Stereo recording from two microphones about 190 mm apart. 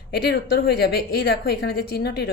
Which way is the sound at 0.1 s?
55° left (ahead or behind).